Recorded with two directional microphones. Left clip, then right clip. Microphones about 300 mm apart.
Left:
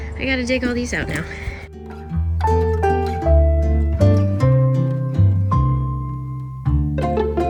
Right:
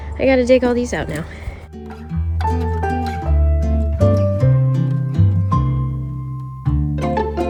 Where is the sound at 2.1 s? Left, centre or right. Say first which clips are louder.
Left 3 dB; centre.